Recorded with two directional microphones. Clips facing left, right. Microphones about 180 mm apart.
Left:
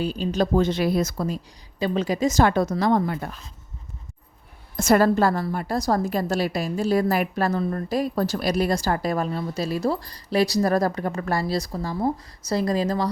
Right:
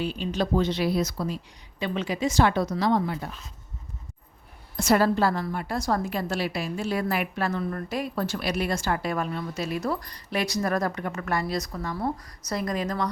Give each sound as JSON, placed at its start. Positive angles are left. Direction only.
{"t": 0.0, "sound": "a woman's voice", "side_deg": 40}
{"t": 1.8, "sound": "a woman's voice", "side_deg": 40}
{"t": 4.8, "sound": "a woman's voice", "side_deg": 45}